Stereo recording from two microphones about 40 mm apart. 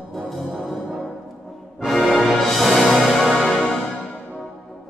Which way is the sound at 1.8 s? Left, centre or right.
Centre.